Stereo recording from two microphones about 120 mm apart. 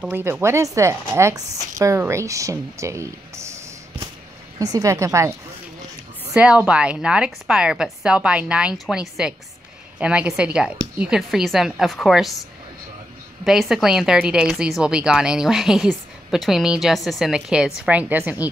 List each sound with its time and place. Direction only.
0.0 s speech: 20° right (ahead or behind)
4.6 s speech: 30° right (ahead or behind)
6.3 s a woman's voice: 10° right (ahead or behind)
13.4 s speech: 5° right (ahead or behind)